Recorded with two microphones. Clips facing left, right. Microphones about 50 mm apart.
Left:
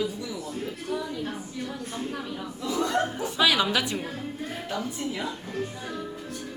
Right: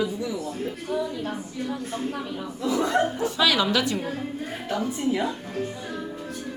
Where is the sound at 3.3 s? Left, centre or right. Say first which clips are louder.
Left 1 dB; centre.